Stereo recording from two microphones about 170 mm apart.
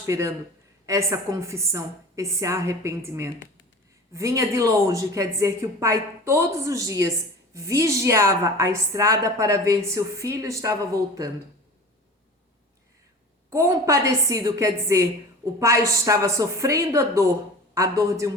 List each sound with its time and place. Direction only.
0.0 s a woman's voice: 15° right (ahead or behind)
13.5 s a woman's voice: 15° right (ahead or behind)